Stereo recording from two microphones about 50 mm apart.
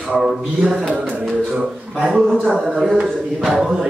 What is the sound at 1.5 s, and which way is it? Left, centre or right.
Speech, right.